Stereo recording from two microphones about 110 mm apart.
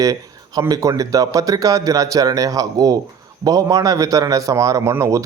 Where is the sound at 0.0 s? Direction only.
30° right (ahead or behind).